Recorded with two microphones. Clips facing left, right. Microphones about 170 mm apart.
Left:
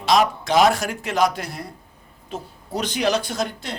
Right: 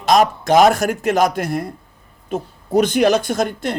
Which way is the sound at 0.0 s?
45° right (ahead or behind).